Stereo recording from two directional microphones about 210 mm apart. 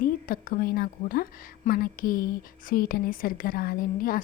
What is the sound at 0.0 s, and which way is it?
A woman's voice, 40° left (ahead or behind).